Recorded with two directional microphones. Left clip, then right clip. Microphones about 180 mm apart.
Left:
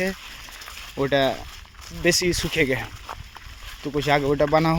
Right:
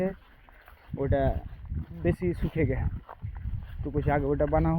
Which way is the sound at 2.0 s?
45° left (ahead or behind).